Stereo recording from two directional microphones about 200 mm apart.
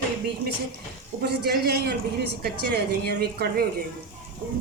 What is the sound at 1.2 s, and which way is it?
A man's voice, 55° right (ahead or behind).